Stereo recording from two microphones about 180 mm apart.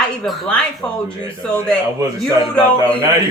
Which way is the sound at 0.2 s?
5° left (ahead or behind).